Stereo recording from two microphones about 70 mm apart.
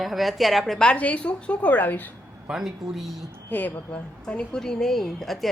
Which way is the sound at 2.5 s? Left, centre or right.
Centre.